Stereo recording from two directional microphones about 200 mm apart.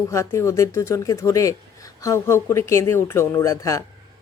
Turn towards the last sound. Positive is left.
turn(degrees=15)  # may be behind; listen again after turning